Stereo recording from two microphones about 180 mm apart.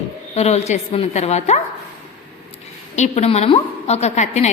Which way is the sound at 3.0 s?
35° left (ahead or behind).